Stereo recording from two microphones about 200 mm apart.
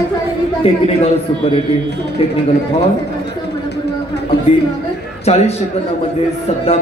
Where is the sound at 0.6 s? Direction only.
30° left (ahead or behind).